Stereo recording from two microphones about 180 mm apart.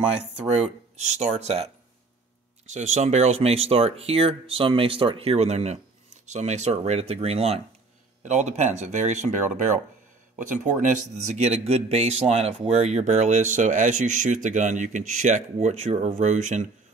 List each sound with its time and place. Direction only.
0.1 s speech: 5° right (ahead or behind)
1.1 s speech: 35° right (ahead or behind)